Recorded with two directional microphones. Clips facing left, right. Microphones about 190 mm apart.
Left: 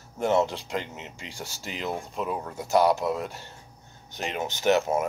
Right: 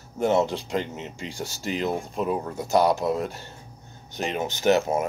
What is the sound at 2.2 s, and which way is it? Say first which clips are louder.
Speech: right 4 dB; 25° right (ahead or behind).